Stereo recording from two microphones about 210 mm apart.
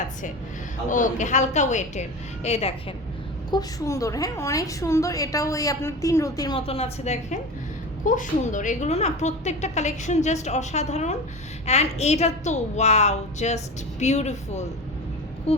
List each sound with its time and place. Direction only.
0.9 s a woman's voice: 40° left (ahead or behind)
3.5 s a woman's voice: 15° left (ahead or behind); by 14.7 s 30° left (ahead or behind)
15.5 s a sound: 30° left (ahead or behind)